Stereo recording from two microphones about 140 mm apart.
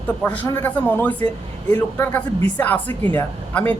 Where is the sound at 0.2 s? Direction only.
10° left (ahead or behind).